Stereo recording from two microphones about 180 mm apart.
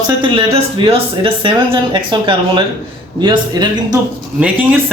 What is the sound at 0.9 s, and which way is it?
Speech, 30° right (ahead or behind).